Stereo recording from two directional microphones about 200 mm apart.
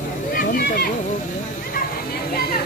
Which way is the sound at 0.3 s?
45° left (ahead or behind).